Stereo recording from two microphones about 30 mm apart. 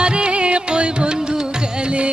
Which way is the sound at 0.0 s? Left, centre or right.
Right.